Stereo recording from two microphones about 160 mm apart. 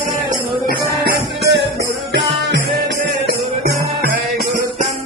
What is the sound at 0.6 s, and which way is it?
Music, 75° right (ahead or behind).